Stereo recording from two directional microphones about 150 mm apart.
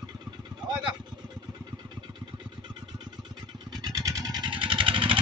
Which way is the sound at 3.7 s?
25° right (ahead or behind).